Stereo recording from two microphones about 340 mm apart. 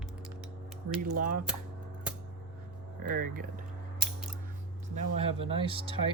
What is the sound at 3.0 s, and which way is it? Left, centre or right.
Speech, right.